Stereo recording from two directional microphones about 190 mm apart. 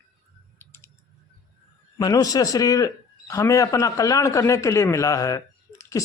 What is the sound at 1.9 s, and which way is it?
A man's voice, 20° left (ahead or behind).